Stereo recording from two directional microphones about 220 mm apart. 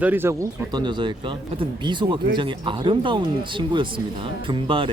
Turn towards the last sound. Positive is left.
turn(degrees=-25)  # may be behind; listen again after turning